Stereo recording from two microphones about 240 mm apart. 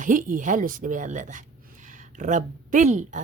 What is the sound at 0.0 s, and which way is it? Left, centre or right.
A woman's voice, right.